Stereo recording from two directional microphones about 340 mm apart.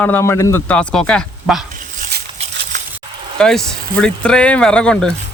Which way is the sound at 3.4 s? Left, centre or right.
Centre.